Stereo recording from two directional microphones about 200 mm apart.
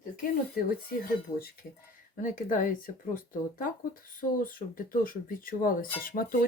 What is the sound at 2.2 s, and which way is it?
Speech, 40° left (ahead or behind).